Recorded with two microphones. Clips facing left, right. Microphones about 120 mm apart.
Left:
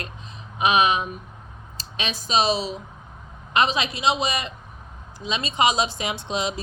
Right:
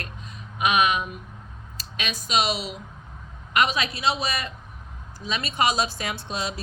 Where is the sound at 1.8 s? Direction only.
30° left (ahead or behind).